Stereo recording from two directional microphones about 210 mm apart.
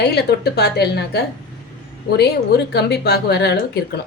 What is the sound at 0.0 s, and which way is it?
Speech, 50° left (ahead or behind).